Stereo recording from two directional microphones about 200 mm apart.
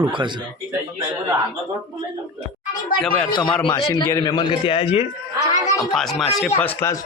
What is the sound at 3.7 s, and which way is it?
A man's voice, 15° left (ahead or behind).